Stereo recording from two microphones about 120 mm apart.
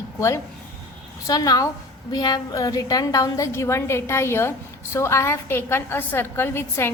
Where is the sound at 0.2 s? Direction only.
25° left (ahead or behind).